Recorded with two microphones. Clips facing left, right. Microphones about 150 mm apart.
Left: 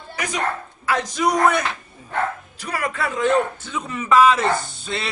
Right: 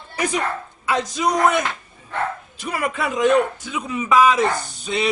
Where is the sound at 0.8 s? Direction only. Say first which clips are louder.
Even; 20° right (ahead or behind).